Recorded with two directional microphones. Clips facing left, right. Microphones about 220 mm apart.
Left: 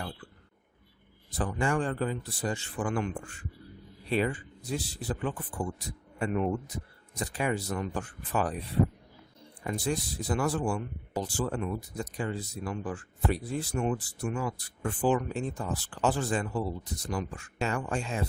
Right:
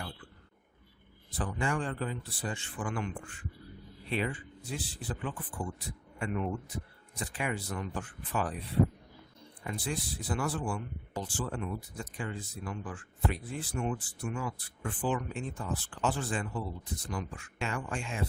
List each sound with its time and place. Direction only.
1.4 s speech: 45° left (ahead or behind)
9.6 s speech: 40° left (ahead or behind)